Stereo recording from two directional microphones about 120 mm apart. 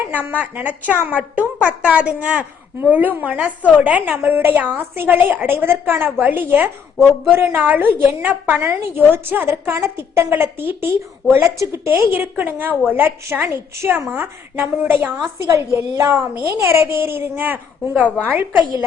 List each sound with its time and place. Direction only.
0.3 s a woman's voice: 15° right (ahead or behind)